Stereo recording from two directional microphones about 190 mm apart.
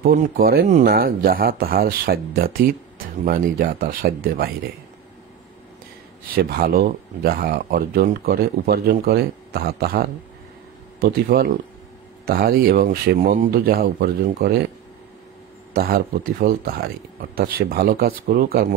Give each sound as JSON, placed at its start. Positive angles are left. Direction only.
{"t": 0.0, "sound": "speech", "side_deg": -50}
{"t": 6.3, "sound": "speech", "side_deg": -50}
{"t": 15.7, "sound": "speech", "side_deg": -50}